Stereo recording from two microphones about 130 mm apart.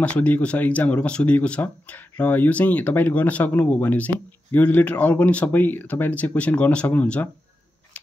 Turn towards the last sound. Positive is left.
turn(degrees=10)  # may be behind; listen again after turning